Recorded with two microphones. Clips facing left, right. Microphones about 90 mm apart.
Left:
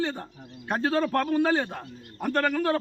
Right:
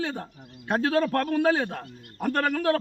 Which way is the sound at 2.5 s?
75° right (ahead or behind).